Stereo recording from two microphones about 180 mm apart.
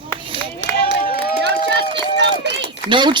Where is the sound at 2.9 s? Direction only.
25° right (ahead or behind).